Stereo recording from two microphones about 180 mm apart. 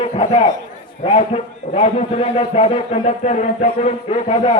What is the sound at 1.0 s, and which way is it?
A man's voice, 30° left (ahead or behind).